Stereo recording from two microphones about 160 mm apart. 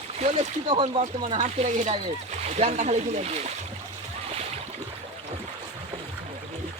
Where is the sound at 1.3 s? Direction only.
45° right (ahead or behind).